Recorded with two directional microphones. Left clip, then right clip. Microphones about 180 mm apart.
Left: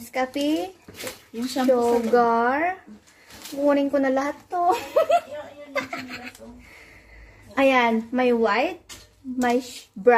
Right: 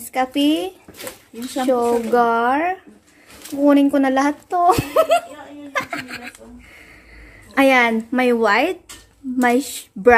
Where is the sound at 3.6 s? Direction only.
25° right (ahead or behind).